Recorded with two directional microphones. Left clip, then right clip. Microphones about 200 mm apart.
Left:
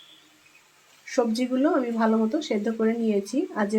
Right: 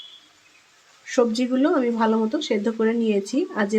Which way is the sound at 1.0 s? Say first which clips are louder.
Right 4 dB; 25° right (ahead or behind).